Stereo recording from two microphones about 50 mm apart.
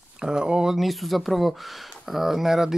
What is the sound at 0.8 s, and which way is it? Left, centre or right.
Speech, centre.